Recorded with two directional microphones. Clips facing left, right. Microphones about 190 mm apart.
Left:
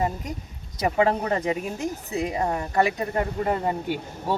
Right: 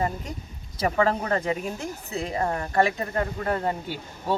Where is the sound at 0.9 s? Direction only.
15° left (ahead or behind).